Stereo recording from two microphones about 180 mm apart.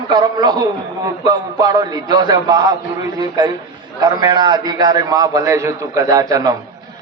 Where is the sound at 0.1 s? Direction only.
25° right (ahead or behind).